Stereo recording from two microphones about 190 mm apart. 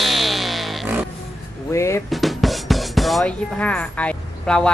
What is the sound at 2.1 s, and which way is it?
Music, centre (ahead or behind).